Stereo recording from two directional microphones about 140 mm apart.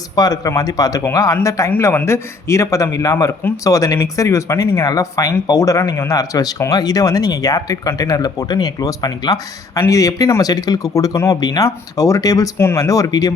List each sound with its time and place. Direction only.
0.2 s a man's voice: 25° left (ahead or behind)